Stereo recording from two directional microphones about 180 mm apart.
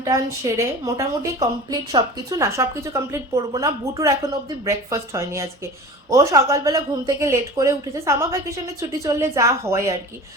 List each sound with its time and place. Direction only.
0.0 s a woman's voice: 15° right (ahead or behind)